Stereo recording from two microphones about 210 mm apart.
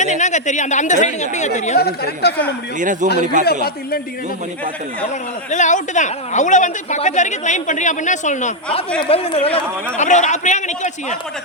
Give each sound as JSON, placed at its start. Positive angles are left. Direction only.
{"t": 0.0, "sound": "a woman's voice", "side_deg": 35}
{"t": 2.2, "sound": "a man's voice", "side_deg": 50}
{"t": 2.7, "sound": "a man's voice", "side_deg": -35}
{"t": 3.4, "sound": "a man's voice", "side_deg": 45}
{"t": 5.5, "sound": "a woman's voice", "side_deg": 35}